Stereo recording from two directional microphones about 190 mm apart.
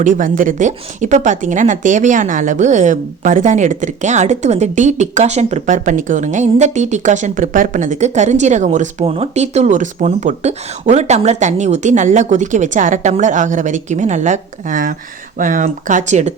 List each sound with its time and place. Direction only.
0.0 s speech: 45° right (ahead or behind)